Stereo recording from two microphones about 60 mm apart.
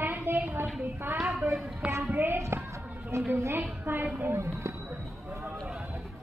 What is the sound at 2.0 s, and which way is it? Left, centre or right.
A woman's voice, right.